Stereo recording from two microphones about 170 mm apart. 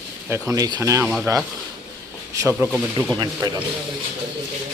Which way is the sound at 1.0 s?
5° right (ahead or behind).